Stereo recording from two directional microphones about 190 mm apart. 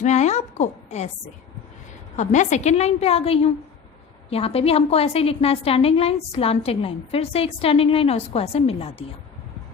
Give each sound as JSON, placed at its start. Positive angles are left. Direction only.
{"t": 0.0, "sound": "a woman's voice", "side_deg": 35}
{"t": 2.1, "sound": "a woman's voice", "side_deg": 40}